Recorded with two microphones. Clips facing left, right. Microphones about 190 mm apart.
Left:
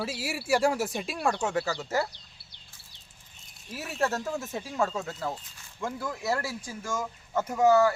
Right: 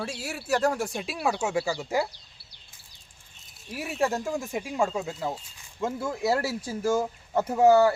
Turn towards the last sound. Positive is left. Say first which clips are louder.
# right 3 dB
turn(degrees=-30)  # may be behind; listen again after turning